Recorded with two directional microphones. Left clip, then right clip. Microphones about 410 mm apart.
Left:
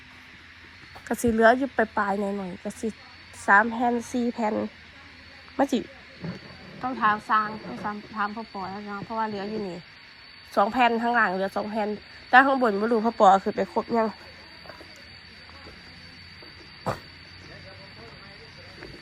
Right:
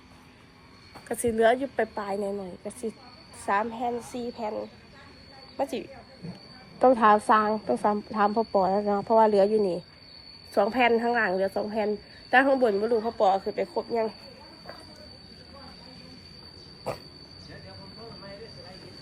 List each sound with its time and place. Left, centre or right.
1.0 s a woman's voice: centre
6.8 s speech: centre